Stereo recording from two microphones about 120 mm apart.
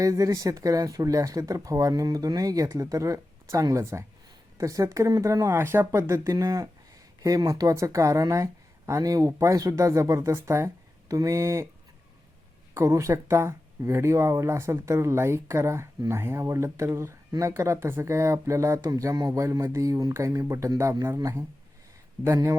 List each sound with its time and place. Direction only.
0.0 s speech: 25° right (ahead or behind)
12.7 s speech: 25° right (ahead or behind)